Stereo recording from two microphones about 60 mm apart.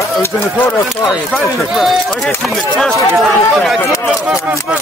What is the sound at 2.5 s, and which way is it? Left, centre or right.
Speech, centre.